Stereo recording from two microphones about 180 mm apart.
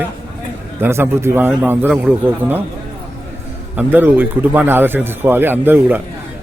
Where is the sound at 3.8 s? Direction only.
10° right (ahead or behind).